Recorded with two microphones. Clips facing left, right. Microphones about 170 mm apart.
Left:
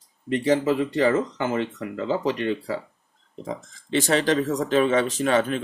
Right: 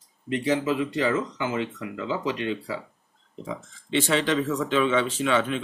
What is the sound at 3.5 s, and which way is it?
Speech, 40° left (ahead or behind).